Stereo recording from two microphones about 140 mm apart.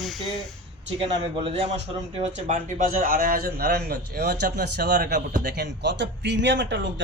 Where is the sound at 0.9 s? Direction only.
40° right (ahead or behind); by 5.5 s 80° right.